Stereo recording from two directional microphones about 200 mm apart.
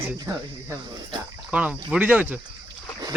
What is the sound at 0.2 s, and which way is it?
Speech, 20° right (ahead or behind).